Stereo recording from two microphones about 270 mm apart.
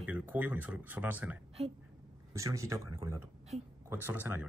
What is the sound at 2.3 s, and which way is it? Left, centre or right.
Speech, centre.